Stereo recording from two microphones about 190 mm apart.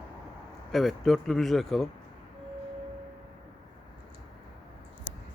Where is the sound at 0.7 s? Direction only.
Centre (ahead or behind).